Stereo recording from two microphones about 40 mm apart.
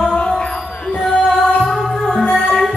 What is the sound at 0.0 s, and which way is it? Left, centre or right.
Music, centre.